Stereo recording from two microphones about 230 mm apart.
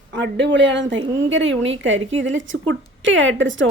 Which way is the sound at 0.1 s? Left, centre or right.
Right.